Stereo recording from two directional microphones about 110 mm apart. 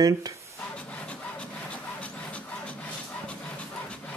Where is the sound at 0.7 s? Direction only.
10° left (ahead or behind).